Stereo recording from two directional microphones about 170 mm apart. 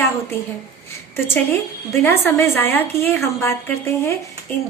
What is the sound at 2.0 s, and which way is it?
A woman's voice, 15° left (ahead or behind).